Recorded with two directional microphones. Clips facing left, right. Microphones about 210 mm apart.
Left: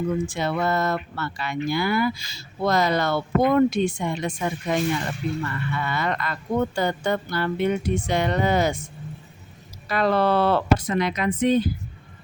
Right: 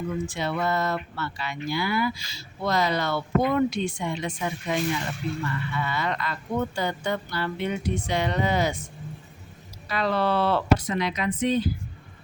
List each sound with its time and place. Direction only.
0.3 s speech: 50° left (ahead or behind)
9.9 s speech: 50° left (ahead or behind)